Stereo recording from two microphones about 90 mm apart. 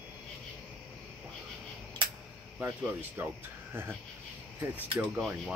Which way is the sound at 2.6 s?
20° right (ahead or behind).